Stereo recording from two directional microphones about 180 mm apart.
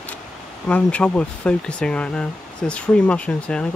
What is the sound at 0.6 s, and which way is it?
Speech, 5° left (ahead or behind).